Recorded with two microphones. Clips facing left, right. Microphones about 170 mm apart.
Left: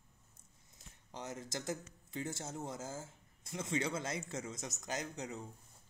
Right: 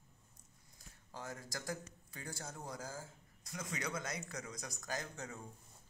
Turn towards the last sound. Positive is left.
turn(degrees=20)  # may be behind; listen again after turning